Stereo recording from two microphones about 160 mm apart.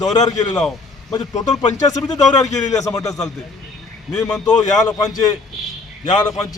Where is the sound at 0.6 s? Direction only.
5° left (ahead or behind).